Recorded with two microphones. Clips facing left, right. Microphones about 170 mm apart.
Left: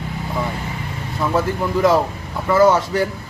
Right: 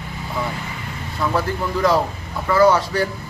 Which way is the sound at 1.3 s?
20° left (ahead or behind).